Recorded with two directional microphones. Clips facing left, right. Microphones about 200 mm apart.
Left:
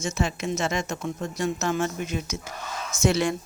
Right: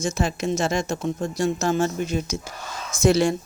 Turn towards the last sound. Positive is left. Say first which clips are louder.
# right 4 dB
turn(degrees=-35)  # may be behind; listen again after turning